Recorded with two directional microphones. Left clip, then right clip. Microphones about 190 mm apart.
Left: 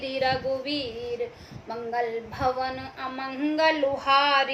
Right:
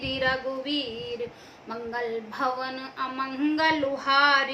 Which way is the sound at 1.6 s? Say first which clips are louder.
Left 3 dB; 20° right (ahead or behind).